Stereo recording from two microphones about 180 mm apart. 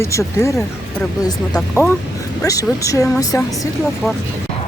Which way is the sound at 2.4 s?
20° left (ahead or behind).